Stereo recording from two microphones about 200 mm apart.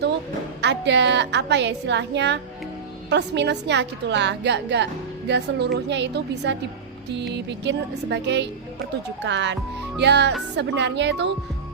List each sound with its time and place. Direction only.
0.6 s a woman's voice: 60° right (ahead or behind)